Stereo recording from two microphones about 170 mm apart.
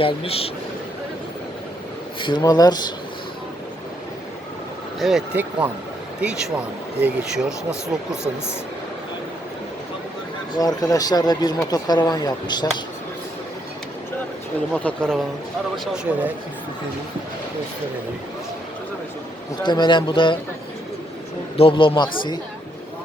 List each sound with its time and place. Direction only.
0.0 s speech: 35° left (ahead or behind)
2.2 s speech: 25° left (ahead or behind)
4.9 s speech: centre (ahead or behind)
7.0 s speech: 5° right (ahead or behind)
10.5 s speech: 20° left (ahead or behind)
14.7 s speech: 5° left (ahead or behind)
19.6 s speech: 25° left (ahead or behind)
21.5 s speech: 30° left (ahead or behind)